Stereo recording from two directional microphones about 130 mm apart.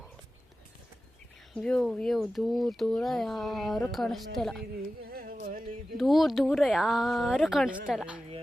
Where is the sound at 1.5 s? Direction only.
5° left (ahead or behind).